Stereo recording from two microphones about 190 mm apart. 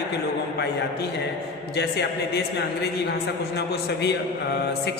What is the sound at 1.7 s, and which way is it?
A man's voice, 60° left (ahead or behind).